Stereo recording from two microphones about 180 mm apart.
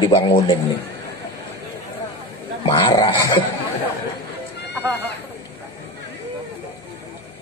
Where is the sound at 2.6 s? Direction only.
25° left (ahead or behind).